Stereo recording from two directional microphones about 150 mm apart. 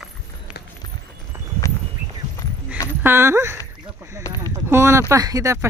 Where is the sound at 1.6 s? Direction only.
20° left (ahead or behind).